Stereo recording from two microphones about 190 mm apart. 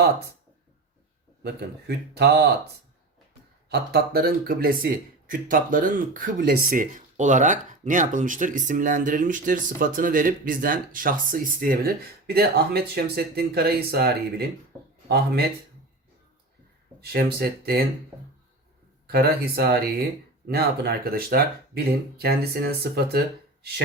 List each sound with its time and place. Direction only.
2.1 s speech: 60° right (ahead or behind)
3.7 s speech: 55° right (ahead or behind)
17.0 s speech: 55° right (ahead or behind)
19.0 s speech: 55° right (ahead or behind)